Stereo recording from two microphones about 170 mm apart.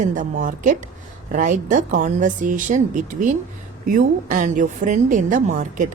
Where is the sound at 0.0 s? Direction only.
50° right (ahead or behind).